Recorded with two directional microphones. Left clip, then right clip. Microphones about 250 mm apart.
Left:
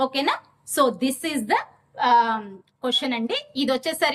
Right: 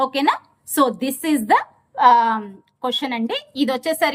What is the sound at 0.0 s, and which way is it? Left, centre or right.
A woman's voice, centre.